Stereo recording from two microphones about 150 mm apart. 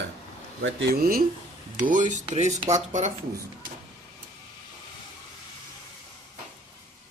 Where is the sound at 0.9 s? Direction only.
80° right.